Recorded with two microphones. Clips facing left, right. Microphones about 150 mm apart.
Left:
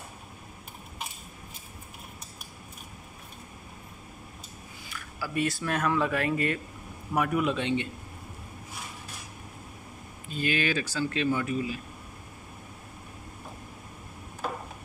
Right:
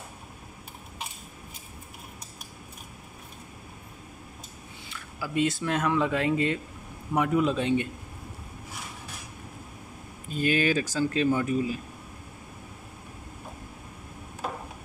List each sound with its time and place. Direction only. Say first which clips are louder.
4.8 s a man's voice: right 1 dB; 25° right (ahead or behind)
7.5 s a man's voice: right 3 dB; 45° right (ahead or behind)
10.3 s speech: right 4 dB; 40° right (ahead or behind)